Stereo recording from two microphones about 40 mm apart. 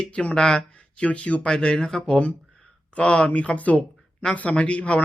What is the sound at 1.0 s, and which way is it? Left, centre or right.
Speech, left.